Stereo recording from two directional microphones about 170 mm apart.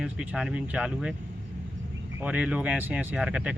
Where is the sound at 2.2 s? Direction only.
5° right (ahead or behind).